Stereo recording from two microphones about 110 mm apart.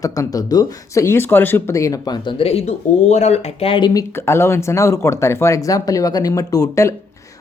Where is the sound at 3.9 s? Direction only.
30° left (ahead or behind).